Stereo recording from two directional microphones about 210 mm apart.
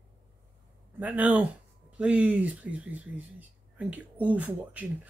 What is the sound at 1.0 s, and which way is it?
Speech, 5° right (ahead or behind).